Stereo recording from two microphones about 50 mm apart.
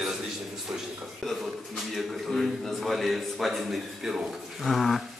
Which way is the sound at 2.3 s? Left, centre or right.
Centre.